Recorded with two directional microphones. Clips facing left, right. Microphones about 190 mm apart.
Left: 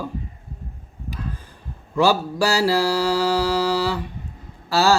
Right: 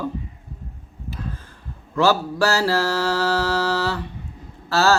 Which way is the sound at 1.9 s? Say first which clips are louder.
Even; 15° left (ahead or behind).